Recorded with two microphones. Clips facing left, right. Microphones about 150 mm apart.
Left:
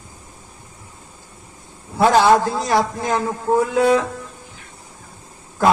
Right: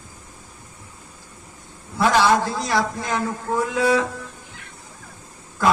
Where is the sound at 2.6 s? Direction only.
50° left (ahead or behind).